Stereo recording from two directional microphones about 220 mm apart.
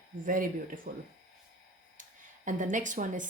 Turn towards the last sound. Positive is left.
turn(degrees=-35)  # may be behind; listen again after turning